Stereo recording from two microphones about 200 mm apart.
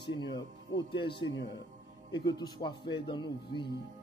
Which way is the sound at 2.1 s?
20° left (ahead or behind).